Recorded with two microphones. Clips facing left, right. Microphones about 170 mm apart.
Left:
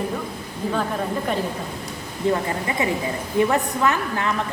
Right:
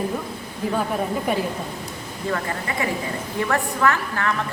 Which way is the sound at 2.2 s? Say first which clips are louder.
Left 4 dB; 20° left (ahead or behind).